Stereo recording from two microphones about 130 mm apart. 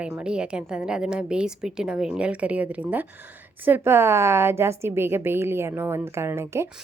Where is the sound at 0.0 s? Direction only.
5° right (ahead or behind).